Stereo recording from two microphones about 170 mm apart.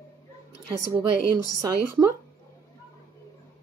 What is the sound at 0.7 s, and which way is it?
A woman's voice, 20° right (ahead or behind).